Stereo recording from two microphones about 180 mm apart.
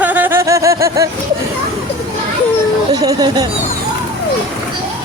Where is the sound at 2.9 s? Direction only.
20° right (ahead or behind).